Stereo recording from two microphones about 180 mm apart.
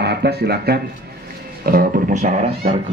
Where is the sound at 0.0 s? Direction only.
65° right (ahead or behind).